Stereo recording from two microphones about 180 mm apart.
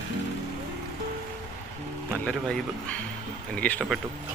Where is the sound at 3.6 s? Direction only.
10° left (ahead or behind).